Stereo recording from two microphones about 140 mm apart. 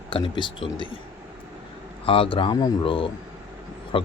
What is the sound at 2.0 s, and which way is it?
Speech, 40° left (ahead or behind).